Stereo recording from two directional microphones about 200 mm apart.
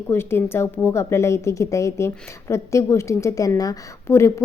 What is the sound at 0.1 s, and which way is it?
Speech, 10° left (ahead or behind).